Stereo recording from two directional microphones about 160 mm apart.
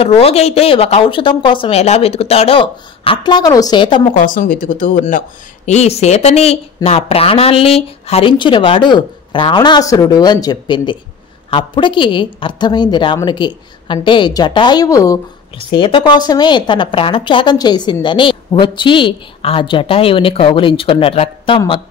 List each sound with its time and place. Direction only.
0.0 s a woman's voice: 40° left (ahead or behind)
4.1 s speech: 55° left (ahead or behind)
5.7 s a woman's voice: 40° left (ahead or behind); by 15.1 s 20° left (ahead or behind)
15.5 s a woman's voice: 30° left (ahead or behind)